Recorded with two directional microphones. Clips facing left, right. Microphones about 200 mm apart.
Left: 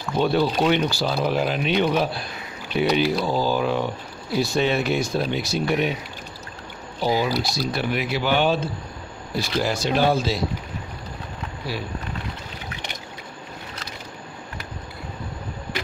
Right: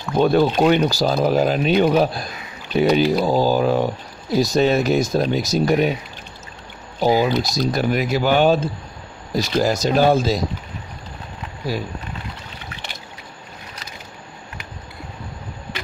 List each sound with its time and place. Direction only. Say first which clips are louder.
0.2 s speech: right 5 dB; 45° right (ahead or behind)
7.0 s speech: right 5 dB; 45° right (ahead or behind)